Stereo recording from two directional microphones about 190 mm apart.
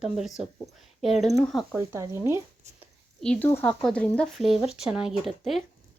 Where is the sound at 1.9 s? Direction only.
15° right (ahead or behind).